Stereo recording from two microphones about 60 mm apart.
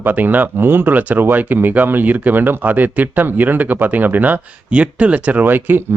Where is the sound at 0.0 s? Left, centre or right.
Right.